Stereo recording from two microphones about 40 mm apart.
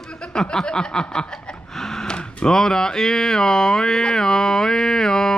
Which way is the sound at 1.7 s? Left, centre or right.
Centre.